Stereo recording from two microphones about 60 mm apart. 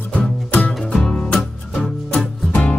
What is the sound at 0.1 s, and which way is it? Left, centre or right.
Music, left.